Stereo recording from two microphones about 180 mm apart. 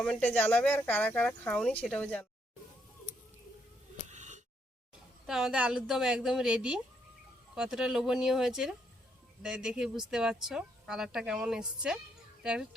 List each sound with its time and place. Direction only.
0.0 s speech: 5° left (ahead or behind)
4.1 s a sound: 40° right (ahead or behind)
5.2 s speech: 5° right (ahead or behind)